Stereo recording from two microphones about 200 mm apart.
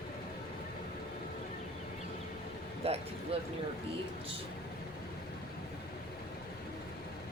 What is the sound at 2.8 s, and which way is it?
Speech, 30° right (ahead or behind).